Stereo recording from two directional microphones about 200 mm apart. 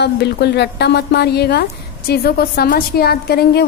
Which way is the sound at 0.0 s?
55° left (ahead or behind).